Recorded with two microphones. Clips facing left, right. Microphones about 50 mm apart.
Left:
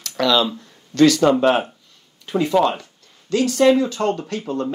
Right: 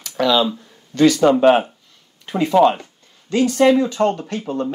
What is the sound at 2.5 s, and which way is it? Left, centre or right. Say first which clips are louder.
Speech: right 5 dB; centre.